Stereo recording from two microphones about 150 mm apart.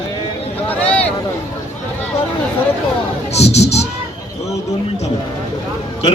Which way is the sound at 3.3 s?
45° left (ahead or behind).